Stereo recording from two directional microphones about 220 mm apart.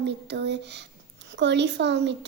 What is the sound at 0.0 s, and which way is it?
A child's voice, 50° right (ahead or behind).